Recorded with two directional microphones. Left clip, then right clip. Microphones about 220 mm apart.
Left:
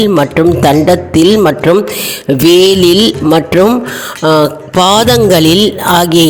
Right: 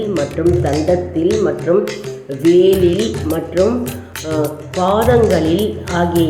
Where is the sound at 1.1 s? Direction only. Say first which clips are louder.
Left 8 dB; 50° left (ahead or behind).